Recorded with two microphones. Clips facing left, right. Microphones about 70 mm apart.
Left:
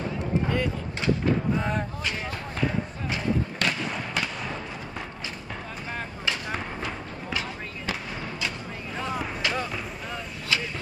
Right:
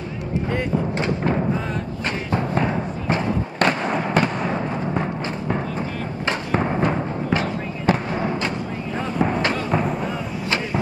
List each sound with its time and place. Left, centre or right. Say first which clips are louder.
0.5 s vehicle: right 5 dB; right
2.3 s music: right 10 dB; right
6.5 s fireworks: right 11 dB; right
9.2 s a sound: right 8 dB; right